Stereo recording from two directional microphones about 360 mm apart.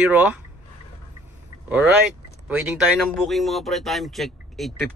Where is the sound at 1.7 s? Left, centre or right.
Centre.